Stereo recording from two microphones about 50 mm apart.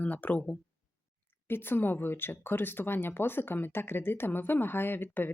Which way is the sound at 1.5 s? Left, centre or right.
Left.